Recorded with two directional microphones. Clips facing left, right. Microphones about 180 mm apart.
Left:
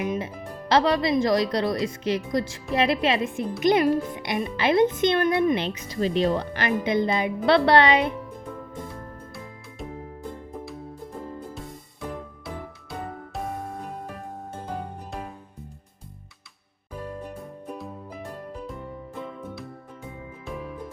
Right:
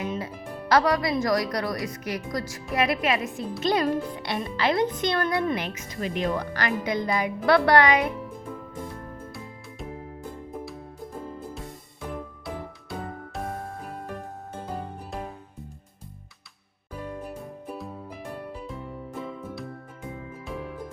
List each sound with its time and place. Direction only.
0.0 s music: 20° left (ahead or behind)
0.7 s speech: 25° left (ahead or behind)
17.2 s music: 5° right (ahead or behind)